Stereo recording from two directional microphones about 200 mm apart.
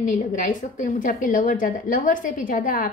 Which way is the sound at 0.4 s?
40° left (ahead or behind).